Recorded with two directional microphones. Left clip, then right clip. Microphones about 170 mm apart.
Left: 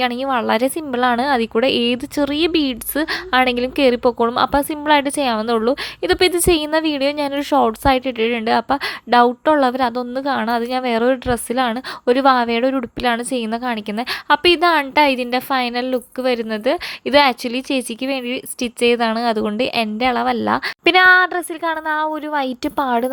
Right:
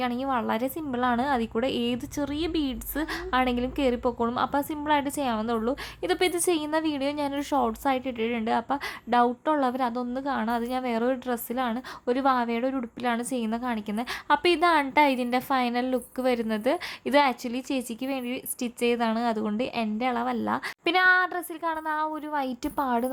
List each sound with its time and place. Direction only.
0.0 s a woman's voice: 20° left (ahead or behind)